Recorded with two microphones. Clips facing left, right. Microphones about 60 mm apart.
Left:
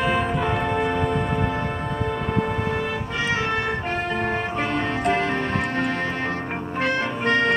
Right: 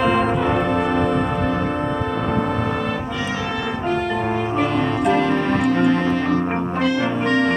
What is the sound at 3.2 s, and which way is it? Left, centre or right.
Music, left.